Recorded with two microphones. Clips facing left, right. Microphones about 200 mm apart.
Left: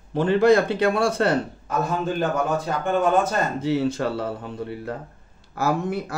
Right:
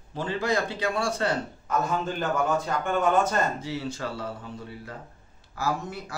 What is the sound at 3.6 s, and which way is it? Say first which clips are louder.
A man's voice: left 10 dB; 60° left (ahead or behind).